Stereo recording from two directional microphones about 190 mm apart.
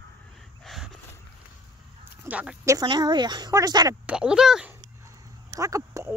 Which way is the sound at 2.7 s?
20° right (ahead or behind).